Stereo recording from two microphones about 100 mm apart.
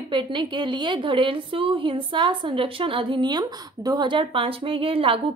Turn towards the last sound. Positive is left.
turn(degrees=-65)  # may be behind; listen again after turning